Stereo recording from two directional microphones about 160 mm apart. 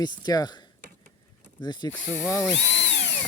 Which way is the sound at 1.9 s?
15° left (ahead or behind).